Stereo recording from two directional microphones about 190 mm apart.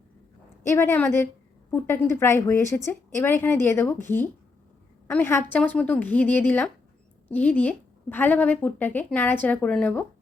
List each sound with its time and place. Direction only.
0.6 s a woman's voice: 15° left (ahead or behind)
5.0 s a woman's voice: 10° left (ahead or behind)